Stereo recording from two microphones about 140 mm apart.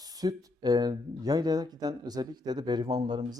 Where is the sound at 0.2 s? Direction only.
25° right (ahead or behind).